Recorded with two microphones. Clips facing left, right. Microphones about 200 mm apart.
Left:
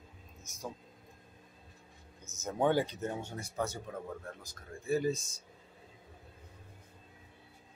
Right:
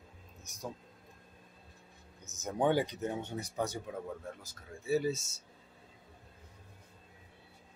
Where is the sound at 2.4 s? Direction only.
15° right (ahead or behind).